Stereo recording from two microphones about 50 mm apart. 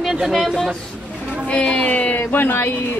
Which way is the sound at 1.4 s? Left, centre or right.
Left.